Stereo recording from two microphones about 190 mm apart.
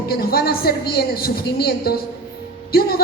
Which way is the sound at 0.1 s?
55° left (ahead or behind).